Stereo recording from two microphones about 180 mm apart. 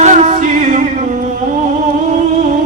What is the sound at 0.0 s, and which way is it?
Music, 45° right (ahead or behind).